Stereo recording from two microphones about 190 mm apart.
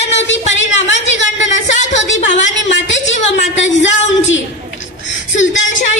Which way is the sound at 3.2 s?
40° left (ahead or behind).